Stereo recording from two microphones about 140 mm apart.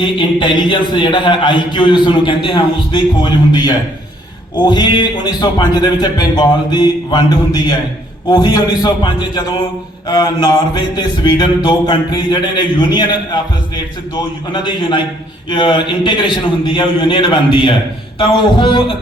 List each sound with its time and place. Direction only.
0.0 s a man's voice: 35° left (ahead or behind)
14.5 s a man's voice: 35° left (ahead or behind)